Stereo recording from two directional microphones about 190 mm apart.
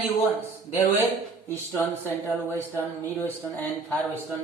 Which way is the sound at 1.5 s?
15° left (ahead or behind).